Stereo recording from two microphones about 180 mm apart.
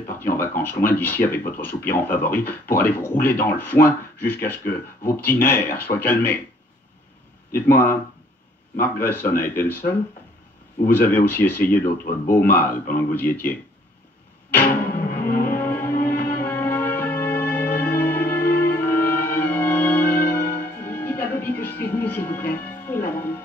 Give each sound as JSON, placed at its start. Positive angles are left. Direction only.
{"t": 0.1, "sound": "a sound", "side_deg": 10}
{"t": 0.6, "sound": "speech", "side_deg": 10}
{"t": 7.5, "sound": "speech", "side_deg": 10}
{"t": 11.0, "sound": "speech", "side_deg": 10}
{"t": 15.1, "sound": "music", "side_deg": 55}
{"t": 15.4, "sound": "music", "side_deg": 10}
{"t": 16.1, "sound": "music", "side_deg": 60}
{"t": 16.4, "sound": "music", "side_deg": 10}
{"t": 20.1, "sound": "music", "side_deg": 60}
{"t": 20.7, "sound": "music", "side_deg": 10}